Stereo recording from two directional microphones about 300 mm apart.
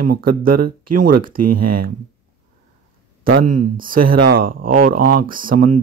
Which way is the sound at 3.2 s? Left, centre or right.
Right.